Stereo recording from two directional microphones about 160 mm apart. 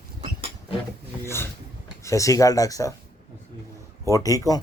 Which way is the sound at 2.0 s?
20° left (ahead or behind).